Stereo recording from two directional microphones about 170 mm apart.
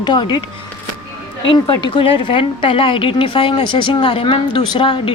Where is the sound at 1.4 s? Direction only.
30° left (ahead or behind).